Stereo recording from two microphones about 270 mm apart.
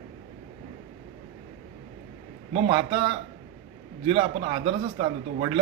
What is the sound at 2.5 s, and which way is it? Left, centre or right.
A man's voice, centre.